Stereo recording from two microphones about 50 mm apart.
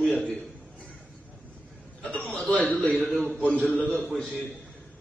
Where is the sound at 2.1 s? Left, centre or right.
Left.